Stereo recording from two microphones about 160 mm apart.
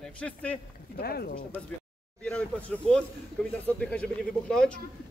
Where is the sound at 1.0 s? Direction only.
70° left (ahead or behind).